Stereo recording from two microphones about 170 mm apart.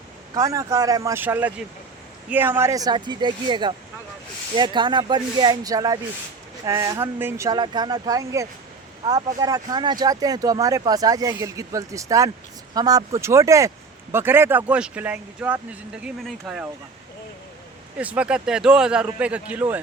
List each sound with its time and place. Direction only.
0.3 s speech: 20° right (ahead or behind)
17.9 s speech: 5° right (ahead or behind)